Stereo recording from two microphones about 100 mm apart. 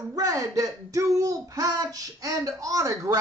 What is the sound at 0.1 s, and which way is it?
Speech, 35° right (ahead or behind).